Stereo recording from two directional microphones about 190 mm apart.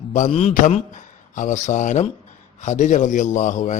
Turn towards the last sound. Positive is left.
turn(degrees=40)  # may be behind; listen again after turning